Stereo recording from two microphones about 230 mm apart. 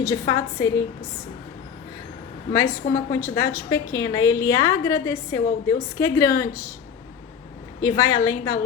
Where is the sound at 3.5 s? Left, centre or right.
Centre.